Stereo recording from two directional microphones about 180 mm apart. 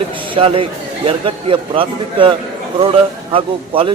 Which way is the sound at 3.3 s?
30° right (ahead or behind).